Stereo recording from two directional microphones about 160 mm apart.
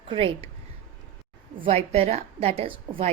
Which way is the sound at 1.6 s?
40° right (ahead or behind).